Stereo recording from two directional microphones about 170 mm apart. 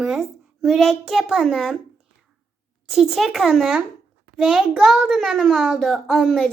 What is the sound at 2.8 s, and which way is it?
A child's voice, centre (ahead or behind).